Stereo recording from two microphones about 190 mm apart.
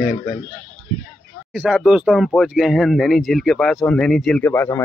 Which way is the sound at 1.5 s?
5° right (ahead or behind).